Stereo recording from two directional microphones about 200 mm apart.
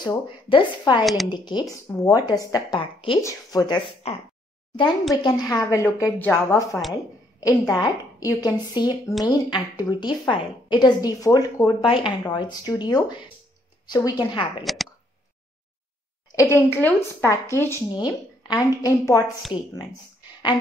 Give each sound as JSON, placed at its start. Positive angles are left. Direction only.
{"t": 0.0, "sound": "a woman's voice", "side_deg": 25}
{"t": 1.0, "sound": "speech", "side_deg": 0}
{"t": 1.3, "sound": "a woman's voice", "side_deg": 20}
{"t": 5.1, "sound": "a woman's voice", "side_deg": 20}
{"t": 14.6, "sound": "speech", "side_deg": 0}
{"t": 16.5, "sound": "a woman's voice", "side_deg": 10}